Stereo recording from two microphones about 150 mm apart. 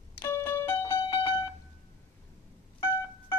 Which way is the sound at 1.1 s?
30° left (ahead or behind).